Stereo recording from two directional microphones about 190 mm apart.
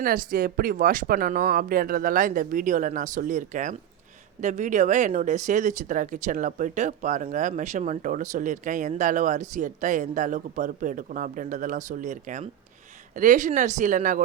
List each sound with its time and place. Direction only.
0.0 s speech: 45° right (ahead or behind)